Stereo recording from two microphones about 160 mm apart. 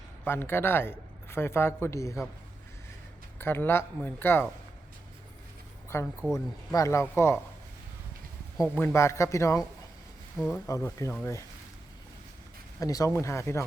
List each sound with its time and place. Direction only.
0.3 s speech: 15° left (ahead or behind)
3.3 s speech: 15° left (ahead or behind)
5.9 s speech: 15° left (ahead or behind)
8.6 s speech: 10° left (ahead or behind)
12.8 s speech: 20° left (ahead or behind)